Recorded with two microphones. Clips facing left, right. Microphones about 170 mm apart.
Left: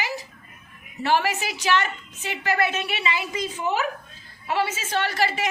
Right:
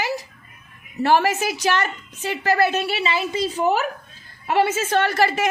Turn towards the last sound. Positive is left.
turn(degrees=-45)  # may be behind; listen again after turning